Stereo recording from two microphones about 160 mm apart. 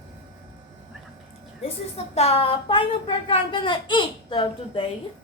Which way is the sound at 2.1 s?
40° left (ahead or behind).